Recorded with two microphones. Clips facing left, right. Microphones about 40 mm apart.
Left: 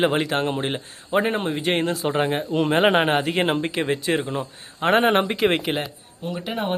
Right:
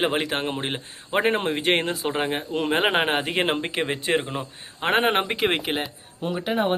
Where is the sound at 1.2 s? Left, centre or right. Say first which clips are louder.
Right 2 dB; right.